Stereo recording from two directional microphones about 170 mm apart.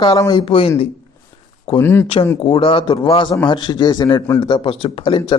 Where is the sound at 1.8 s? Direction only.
10° left (ahead or behind).